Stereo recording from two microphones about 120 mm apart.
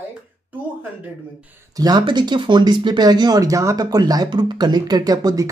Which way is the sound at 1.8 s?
35° right (ahead or behind).